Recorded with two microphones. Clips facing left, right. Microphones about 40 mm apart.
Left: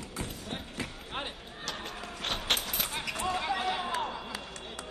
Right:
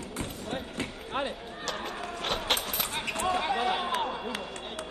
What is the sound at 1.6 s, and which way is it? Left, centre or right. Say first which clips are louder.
Speech: right 4 dB; centre.